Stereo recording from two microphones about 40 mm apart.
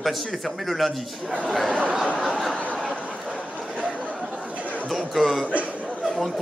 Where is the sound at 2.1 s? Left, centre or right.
Centre.